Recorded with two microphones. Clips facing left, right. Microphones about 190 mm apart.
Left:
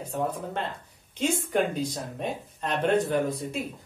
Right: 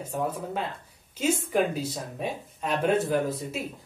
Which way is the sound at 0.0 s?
10° right (ahead or behind).